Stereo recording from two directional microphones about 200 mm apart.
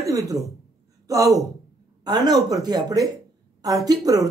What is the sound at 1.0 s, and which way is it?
A woman's voice, 15° right (ahead or behind).